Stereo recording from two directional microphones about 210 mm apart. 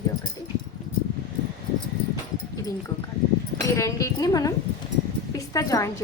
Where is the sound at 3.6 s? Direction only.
15° left (ahead or behind).